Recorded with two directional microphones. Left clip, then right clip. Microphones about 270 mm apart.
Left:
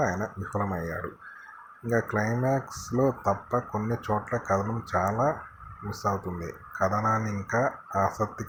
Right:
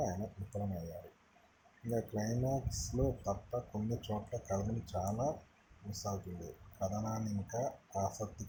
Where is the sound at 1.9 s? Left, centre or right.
Centre.